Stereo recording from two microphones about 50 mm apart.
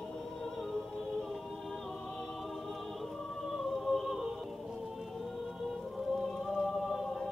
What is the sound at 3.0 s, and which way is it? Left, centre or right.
Choir, centre.